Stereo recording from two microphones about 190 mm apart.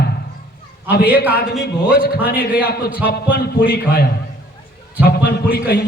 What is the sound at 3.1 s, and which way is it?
A man's voice, 55° left (ahead or behind).